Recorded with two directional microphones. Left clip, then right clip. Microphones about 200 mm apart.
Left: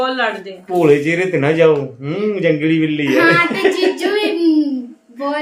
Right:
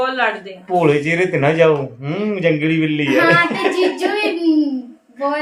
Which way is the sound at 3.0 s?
25° left (ahead or behind).